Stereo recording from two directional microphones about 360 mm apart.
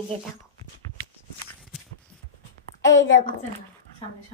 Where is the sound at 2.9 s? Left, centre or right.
Left.